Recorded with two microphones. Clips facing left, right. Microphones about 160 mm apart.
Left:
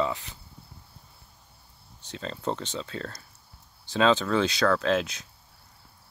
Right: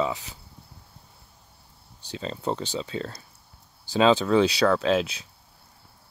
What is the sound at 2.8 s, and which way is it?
Speech, 20° right (ahead or behind).